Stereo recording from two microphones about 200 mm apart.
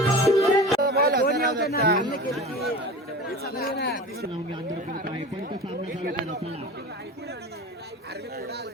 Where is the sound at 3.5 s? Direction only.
50° left (ahead or behind).